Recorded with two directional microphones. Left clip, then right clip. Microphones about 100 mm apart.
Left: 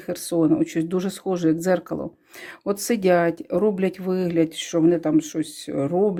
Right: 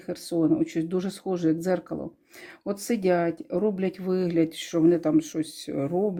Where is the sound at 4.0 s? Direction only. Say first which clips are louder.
Left 3 dB; 20° left (ahead or behind).